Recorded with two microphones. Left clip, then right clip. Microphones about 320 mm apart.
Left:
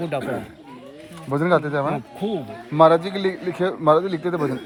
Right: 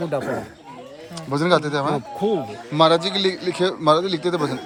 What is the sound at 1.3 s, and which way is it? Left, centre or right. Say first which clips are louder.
A man's voice: right 1 dB; centre.